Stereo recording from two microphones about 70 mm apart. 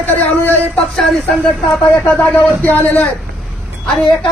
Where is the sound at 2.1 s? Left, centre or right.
Left.